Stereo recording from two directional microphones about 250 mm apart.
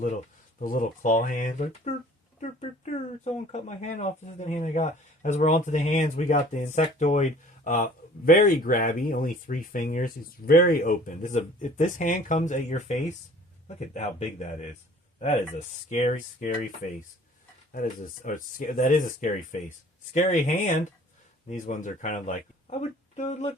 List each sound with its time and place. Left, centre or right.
0.6 s speech: left
15.5 s speech: left